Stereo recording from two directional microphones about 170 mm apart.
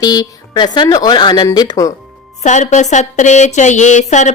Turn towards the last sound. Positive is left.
turn(degrees=45)  # may be behind; listen again after turning